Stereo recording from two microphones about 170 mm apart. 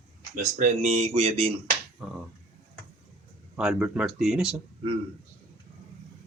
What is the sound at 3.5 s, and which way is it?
Speech, 5° right (ahead or behind).